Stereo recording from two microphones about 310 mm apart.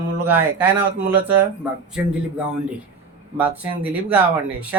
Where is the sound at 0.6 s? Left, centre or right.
Right.